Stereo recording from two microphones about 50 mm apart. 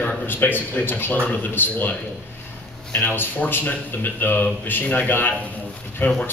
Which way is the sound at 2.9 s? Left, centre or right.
Left.